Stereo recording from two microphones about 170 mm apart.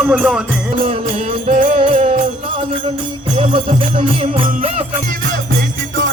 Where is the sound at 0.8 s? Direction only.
35° right (ahead or behind).